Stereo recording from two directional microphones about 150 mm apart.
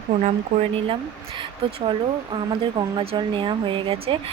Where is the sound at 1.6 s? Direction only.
35° right (ahead or behind).